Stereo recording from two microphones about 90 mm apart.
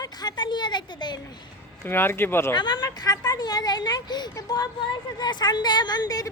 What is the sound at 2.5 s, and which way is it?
A woman's voice, 50° left (ahead or behind).